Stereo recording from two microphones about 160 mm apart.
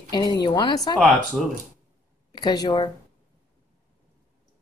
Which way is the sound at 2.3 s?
25° left (ahead or behind).